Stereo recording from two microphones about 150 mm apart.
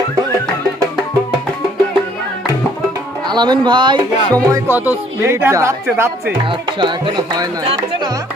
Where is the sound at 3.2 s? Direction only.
30° right (ahead or behind).